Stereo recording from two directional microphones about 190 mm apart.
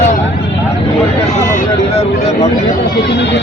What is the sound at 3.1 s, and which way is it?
Speech, 65° left (ahead or behind).